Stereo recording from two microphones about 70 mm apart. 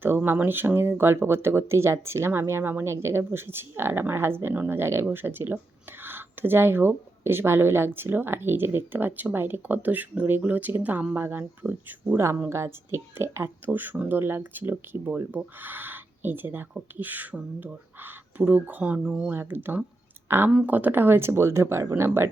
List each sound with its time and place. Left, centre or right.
0.3 s speech: right
12.5 s speech: right
13.7 s speech: right
19.3 s speech: right
20.7 s speech: right